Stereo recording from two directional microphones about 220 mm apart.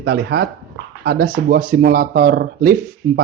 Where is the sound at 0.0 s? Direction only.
50° right (ahead or behind).